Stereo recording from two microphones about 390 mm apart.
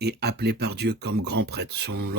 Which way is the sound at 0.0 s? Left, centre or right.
Right.